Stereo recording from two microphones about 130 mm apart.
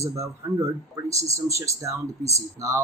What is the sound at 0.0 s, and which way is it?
Speech, 25° right (ahead or behind).